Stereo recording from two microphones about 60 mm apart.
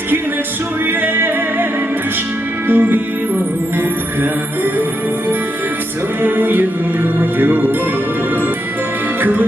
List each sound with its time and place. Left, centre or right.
1.0 s music: right
2.6 s music: right
6.2 s music: right
9.2 s music: right